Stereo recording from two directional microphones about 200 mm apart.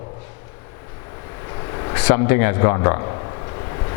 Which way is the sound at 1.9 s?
20° left (ahead or behind).